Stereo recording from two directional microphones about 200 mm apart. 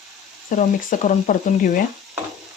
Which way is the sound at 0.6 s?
40° left (ahead or behind).